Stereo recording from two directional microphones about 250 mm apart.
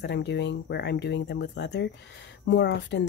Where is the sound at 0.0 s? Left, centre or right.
Left.